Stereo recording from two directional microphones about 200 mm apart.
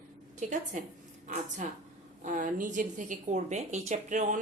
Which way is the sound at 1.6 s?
40° right (ahead or behind).